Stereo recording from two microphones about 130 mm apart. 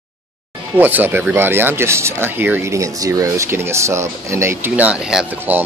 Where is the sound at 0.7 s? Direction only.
15° right (ahead or behind).